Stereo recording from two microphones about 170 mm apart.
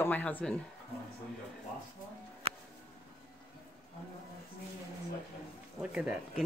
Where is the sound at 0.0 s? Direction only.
10° left (ahead or behind).